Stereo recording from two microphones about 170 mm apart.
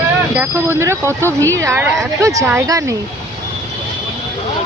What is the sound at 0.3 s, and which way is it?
Speech, 15° right (ahead or behind).